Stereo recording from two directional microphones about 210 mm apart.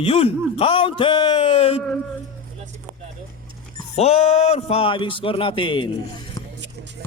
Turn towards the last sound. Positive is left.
turn(degrees=15)  # may be behind; listen again after turning